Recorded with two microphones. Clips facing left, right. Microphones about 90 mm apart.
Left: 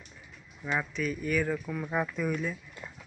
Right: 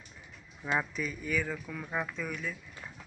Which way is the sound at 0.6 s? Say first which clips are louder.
Left 1 dB; 5° right (ahead or behind).